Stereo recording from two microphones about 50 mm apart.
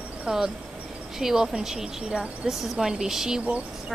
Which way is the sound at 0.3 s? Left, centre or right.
Centre.